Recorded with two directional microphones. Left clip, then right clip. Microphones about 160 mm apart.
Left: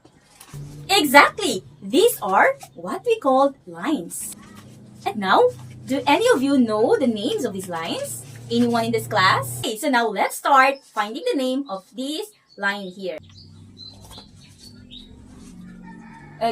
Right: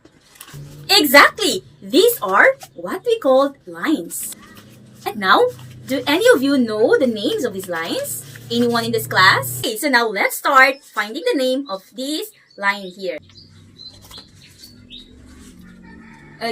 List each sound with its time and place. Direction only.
0.9 s a woman's voice: 15° left (ahead or behind)
5.0 s a woman's voice: 15° left (ahead or behind)